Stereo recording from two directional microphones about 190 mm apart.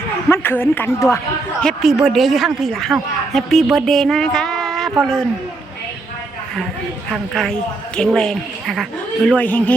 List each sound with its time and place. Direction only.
0.3 s a woman's voice: 10° left (ahead or behind)
1.6 s a woman's voice: centre (ahead or behind)
7.9 s a woman's voice: 5° left (ahead or behind)